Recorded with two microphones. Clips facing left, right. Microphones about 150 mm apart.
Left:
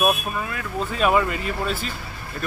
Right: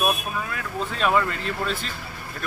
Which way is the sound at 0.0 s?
5° left (ahead or behind).